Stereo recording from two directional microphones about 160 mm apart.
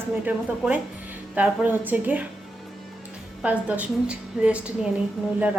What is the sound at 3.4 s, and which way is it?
A woman's voice, 10° right (ahead or behind).